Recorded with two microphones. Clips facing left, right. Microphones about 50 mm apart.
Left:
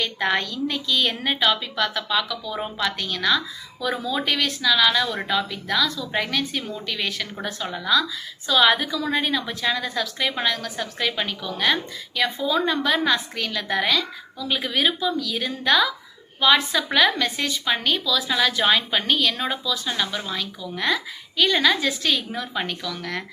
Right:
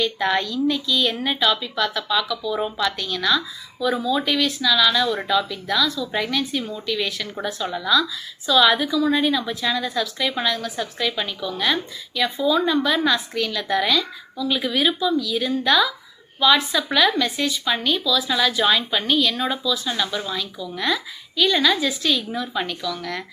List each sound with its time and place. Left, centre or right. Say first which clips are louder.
0.2 s a woman's voice: right 2 dB; left
19.0 s a woman's voice: right 2 dB; left